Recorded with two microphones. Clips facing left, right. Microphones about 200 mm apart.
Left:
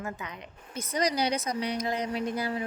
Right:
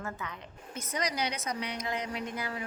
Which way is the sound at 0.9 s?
35° left (ahead or behind).